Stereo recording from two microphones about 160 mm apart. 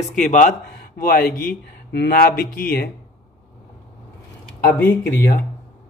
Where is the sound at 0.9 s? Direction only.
65° left (ahead or behind).